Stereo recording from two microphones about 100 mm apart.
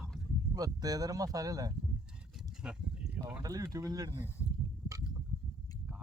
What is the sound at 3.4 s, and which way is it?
Speech, 35° right (ahead or behind).